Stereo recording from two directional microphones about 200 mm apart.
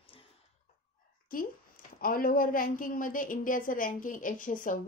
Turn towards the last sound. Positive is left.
turn(degrees=40)  # may be behind; listen again after turning